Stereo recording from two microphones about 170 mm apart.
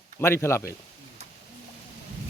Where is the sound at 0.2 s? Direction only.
15° left (ahead or behind).